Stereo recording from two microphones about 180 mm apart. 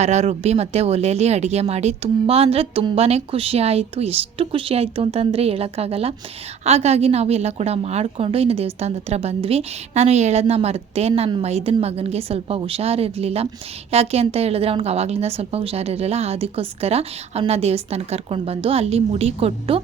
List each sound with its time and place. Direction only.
0.0 s a woman's voice: 40° right (ahead or behind)